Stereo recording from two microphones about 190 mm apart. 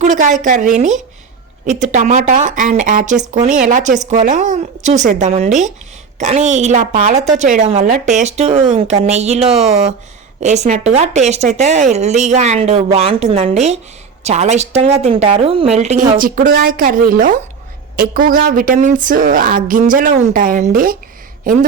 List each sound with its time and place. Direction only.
0.0 s a woman's voice: 40° right (ahead or behind)
9.5 s speech: centre (ahead or behind)
10.4 s a woman's voice: 35° right (ahead or behind)